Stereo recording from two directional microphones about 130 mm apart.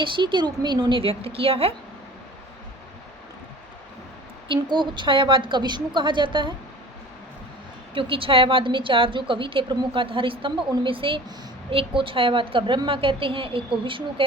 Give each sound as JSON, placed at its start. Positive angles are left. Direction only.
{"t": 0.0, "sound": "a woman's voice", "side_deg": -40}
{"t": 4.4, "sound": "a woman's voice", "side_deg": -35}
{"t": 7.9, "sound": "a woman's voice", "side_deg": -45}